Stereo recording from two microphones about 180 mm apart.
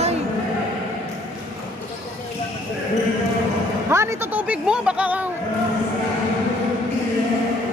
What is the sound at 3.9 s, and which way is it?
Speech, 15° right (ahead or behind).